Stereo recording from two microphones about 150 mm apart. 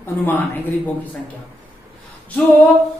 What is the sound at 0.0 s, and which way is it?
Speech, 15° left (ahead or behind).